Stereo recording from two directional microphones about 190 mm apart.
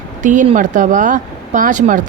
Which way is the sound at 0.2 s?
40° right (ahead or behind).